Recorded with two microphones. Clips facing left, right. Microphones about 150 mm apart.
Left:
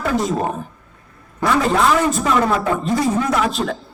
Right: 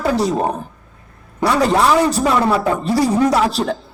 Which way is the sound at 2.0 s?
35° right (ahead or behind).